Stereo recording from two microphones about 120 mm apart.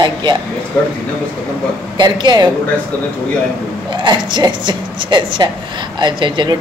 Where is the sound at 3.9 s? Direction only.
40° right (ahead or behind).